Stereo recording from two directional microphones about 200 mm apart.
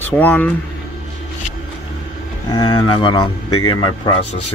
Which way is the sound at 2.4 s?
20° left (ahead or behind).